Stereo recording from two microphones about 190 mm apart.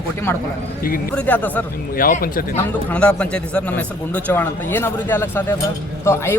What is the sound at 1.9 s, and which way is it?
Speech, 50° left (ahead or behind).